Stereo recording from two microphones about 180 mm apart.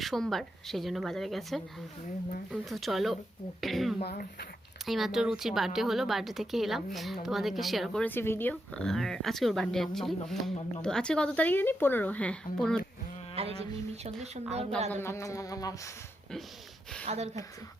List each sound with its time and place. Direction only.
0.0 s speech: centre (ahead or behind)
13.3 s speech: 35° right (ahead or behind)
15.0 s a sound: 15° left (ahead or behind)
17.1 s speech: 35° right (ahead or behind)